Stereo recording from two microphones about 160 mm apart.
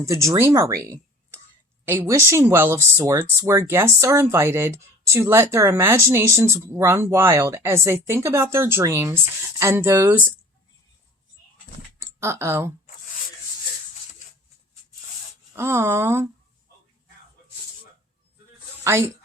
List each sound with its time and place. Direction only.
0.0 s speech: 20° right (ahead or behind)
12.2 s speech: 15° right (ahead or behind)
15.5 s speech: 15° right (ahead or behind)
18.9 s speech: 15° right (ahead or behind)